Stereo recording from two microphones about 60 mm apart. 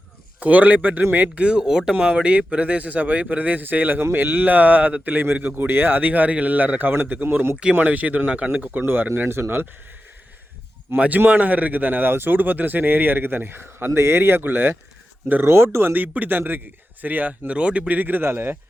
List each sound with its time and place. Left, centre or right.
0.3 s speech: right
1.4 s speech: centre
8.8 s speech: right
10.9 s speech: right